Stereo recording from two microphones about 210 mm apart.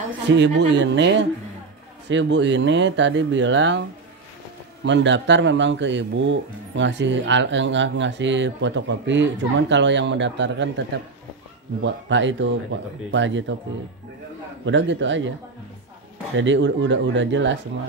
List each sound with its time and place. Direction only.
0.3 s speech: 60° right (ahead or behind)
4.8 s speech: 60° right (ahead or behind)
11.8 s speech: 60° right (ahead or behind)
14.6 s speech: 60° right (ahead or behind)
16.3 s speech: 60° right (ahead or behind)